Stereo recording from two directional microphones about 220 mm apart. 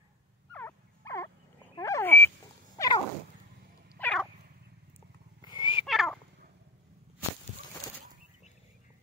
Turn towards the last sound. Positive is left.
turn(degrees=15)  # may be behind; listen again after turning